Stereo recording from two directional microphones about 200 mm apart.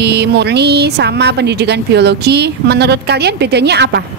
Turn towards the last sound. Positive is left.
turn(degrees=-55)  # may be behind; listen again after turning